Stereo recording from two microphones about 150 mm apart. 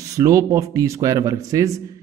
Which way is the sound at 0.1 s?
20° right (ahead or behind).